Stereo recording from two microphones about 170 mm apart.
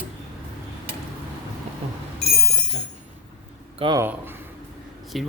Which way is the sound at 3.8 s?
25° right (ahead or behind).